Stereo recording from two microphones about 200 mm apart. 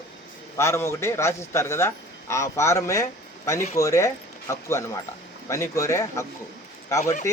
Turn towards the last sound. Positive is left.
turn(degrees=35)  # may be behind; listen again after turning